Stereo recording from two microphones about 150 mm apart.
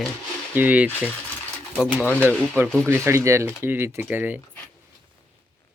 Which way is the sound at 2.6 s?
15° right (ahead or behind).